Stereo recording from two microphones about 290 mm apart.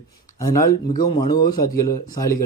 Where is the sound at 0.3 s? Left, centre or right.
Centre.